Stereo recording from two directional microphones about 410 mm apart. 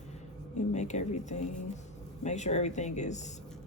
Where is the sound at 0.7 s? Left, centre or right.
Centre.